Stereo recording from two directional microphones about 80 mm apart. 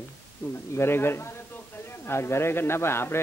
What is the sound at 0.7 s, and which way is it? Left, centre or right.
A man's voice, left.